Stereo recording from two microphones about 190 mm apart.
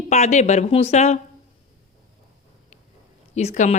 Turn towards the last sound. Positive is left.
turn(degrees=35)  # may be behind; listen again after turning